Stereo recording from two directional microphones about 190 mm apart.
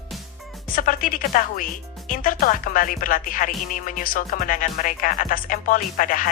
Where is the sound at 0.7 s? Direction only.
45° left (ahead or behind).